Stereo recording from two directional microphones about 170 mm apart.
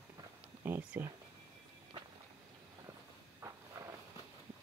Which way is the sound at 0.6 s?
10° right (ahead or behind).